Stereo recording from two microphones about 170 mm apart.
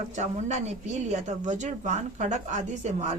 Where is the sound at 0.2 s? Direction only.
40° right (ahead or behind).